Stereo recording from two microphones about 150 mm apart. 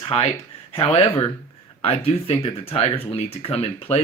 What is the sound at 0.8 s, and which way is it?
Speech, 40° left (ahead or behind).